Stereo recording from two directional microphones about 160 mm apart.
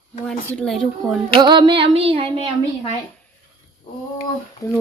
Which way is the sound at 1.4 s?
30° right (ahead or behind).